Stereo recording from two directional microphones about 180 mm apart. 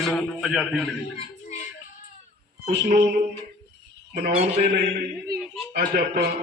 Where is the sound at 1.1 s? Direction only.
40° left (ahead or behind).